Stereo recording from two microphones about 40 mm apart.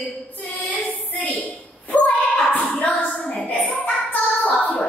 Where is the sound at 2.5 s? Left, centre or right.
Left.